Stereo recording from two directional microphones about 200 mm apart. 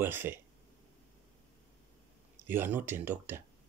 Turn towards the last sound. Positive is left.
turn(degrees=-10)  # may be behind; listen again after turning